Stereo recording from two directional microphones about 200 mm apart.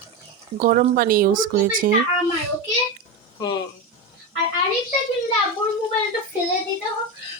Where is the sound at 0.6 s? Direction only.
45° right (ahead or behind).